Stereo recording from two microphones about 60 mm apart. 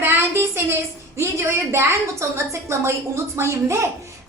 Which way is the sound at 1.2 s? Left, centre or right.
Right.